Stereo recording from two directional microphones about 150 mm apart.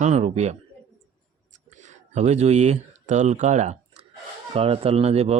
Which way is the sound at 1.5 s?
55° right (ahead or behind).